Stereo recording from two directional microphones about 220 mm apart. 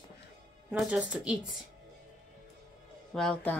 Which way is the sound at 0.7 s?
5° right (ahead or behind).